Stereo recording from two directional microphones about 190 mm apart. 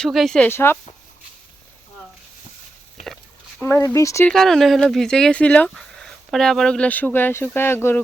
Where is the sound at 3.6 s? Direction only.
15° left (ahead or behind).